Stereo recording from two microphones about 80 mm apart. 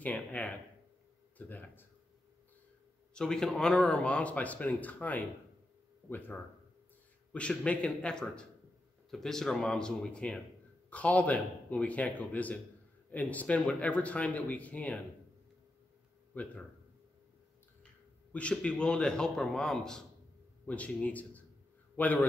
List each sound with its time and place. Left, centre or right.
0.0 s speech: centre
3.2 s speech: centre; by 6.3 s left
7.3 s speech: centre
16.3 s speech: centre
18.3 s speech: centre
20.6 s a man's voice: centre